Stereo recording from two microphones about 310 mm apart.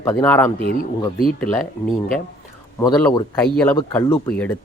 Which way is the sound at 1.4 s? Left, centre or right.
Centre.